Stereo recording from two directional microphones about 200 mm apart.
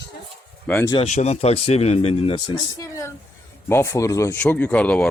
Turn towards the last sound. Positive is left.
turn(degrees=5)  # may be behind; listen again after turning